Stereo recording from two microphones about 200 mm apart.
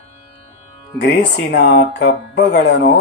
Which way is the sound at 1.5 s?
50° left (ahead or behind).